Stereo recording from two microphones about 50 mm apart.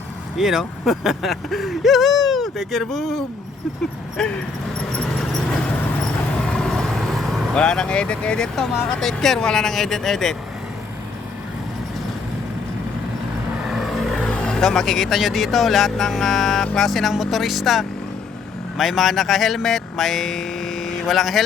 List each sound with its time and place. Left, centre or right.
0.3 s speech: centre
6.4 s vehicle: centre
7.5 s speech: centre
9.0 s speech: centre
13.7 s vehicle: centre
14.2 s speech: centre